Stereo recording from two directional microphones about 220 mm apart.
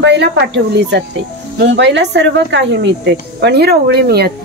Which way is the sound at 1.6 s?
50° right (ahead or behind).